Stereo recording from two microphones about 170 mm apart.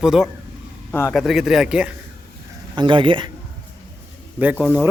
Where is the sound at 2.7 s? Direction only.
30° right (ahead or behind).